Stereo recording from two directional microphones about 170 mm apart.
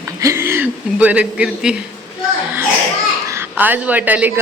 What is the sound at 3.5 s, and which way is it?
Speech, 10° right (ahead or behind).